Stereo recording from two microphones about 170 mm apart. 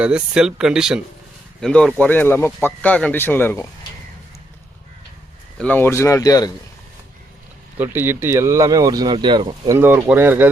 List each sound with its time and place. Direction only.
0.0 s speech: 5° right (ahead or behind); by 3.7 s 15° left (ahead or behind)
5.5 s speech: 10° left (ahead or behind)
7.8 s speech: 15° right (ahead or behind); by 9.7 s 30° right (ahead or behind)
9.7 s speech: 15° right (ahead or behind)